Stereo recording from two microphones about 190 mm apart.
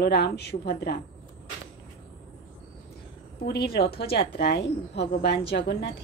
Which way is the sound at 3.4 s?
55° left (ahead or behind).